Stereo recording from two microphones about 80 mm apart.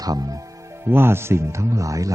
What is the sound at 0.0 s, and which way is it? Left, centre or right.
Speech, right.